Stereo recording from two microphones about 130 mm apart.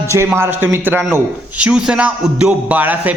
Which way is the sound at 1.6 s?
5° right (ahead or behind).